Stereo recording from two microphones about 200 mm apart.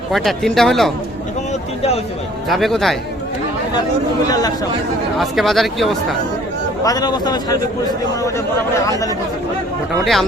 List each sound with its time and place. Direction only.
0.1 s a man's voice: centre (ahead or behind)
2.5 s a man's voice: centre (ahead or behind)
4.3 s speech: 20° left (ahead or behind)
5.1 s a man's voice: centre (ahead or behind)
6.8 s a man's voice: 20° left (ahead or behind)
8.9 s speech: 15° left (ahead or behind)
10.0 s a man's voice: centre (ahead or behind)